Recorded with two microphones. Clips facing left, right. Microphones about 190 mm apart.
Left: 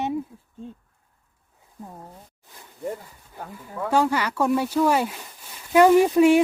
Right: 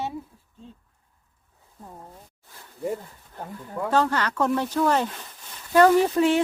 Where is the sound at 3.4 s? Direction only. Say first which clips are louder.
Right 1 dB; 10° right (ahead or behind).